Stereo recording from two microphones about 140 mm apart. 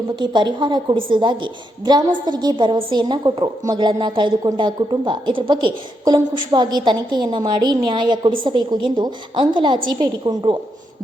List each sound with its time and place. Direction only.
0.2 s a woman's voice: 35° right (ahead or behind)